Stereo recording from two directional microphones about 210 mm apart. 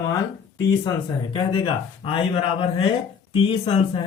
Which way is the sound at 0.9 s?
25° left (ahead or behind).